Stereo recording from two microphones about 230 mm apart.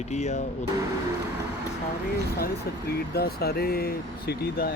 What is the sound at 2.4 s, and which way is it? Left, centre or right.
Speech, left.